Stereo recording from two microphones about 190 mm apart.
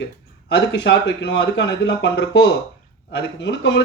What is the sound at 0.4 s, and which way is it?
Speech, 65° left (ahead or behind).